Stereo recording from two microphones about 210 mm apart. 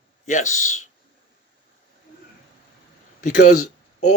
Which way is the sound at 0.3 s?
35° left (ahead or behind).